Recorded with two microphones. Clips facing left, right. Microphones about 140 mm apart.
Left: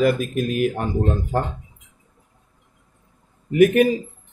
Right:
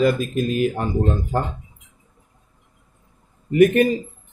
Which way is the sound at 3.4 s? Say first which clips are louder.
Even; 5° left (ahead or behind).